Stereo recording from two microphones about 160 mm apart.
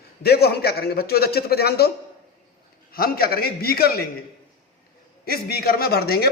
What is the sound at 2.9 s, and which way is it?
A man's voice, 70° left (ahead or behind).